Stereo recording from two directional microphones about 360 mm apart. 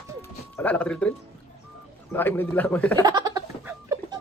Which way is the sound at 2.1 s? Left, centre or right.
Centre.